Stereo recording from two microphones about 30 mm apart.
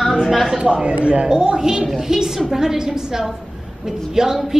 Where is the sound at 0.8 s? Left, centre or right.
Right.